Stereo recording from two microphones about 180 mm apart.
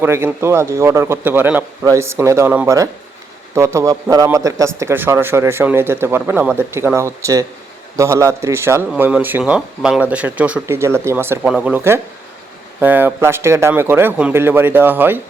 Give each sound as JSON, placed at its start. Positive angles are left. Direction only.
{"t": 0.0, "sound": "speech", "side_deg": -10}